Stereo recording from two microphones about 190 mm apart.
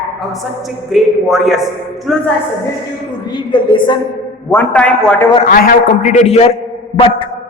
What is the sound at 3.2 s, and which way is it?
Speech, 25° left (ahead or behind).